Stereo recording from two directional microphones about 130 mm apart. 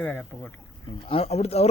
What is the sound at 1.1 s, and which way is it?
Speech, 50° left (ahead or behind).